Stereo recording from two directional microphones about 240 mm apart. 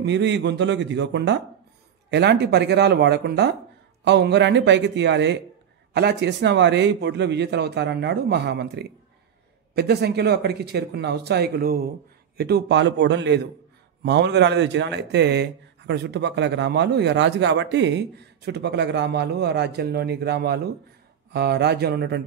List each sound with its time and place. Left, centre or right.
0.0 s speech: right